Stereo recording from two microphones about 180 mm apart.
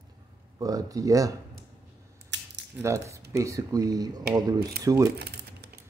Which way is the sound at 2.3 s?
80° right.